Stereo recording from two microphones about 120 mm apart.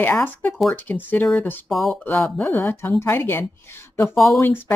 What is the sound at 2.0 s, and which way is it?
A woman's voice, 20° left (ahead or behind).